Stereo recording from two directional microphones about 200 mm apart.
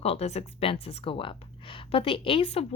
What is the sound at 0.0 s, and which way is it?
A woman's voice, 30° left (ahead or behind).